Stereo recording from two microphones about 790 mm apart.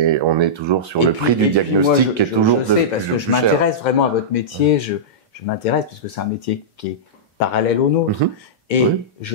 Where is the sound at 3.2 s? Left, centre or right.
Left.